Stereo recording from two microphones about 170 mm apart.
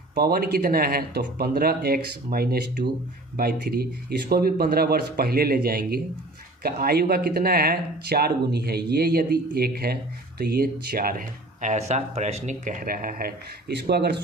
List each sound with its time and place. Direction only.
0.1 s speech: 65° right (ahead or behind)